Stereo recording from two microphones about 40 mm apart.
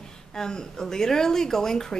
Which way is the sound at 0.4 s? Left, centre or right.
Centre.